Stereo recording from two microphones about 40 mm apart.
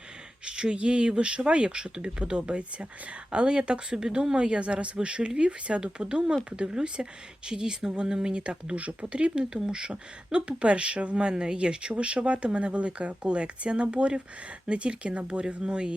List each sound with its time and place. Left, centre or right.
0.4 s speech: right